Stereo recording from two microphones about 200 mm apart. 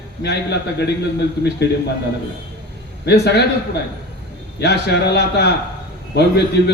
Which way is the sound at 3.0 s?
55° left (ahead or behind).